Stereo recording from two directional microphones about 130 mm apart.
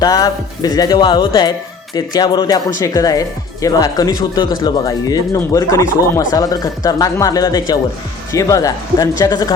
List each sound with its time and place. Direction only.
0.0 s speech: 30° left (ahead or behind)